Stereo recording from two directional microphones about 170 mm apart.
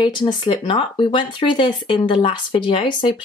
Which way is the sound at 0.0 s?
25° left (ahead or behind).